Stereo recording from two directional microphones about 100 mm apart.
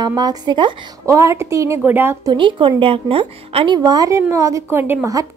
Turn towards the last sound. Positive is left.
turn(degrees=-20)  # may be behind; listen again after turning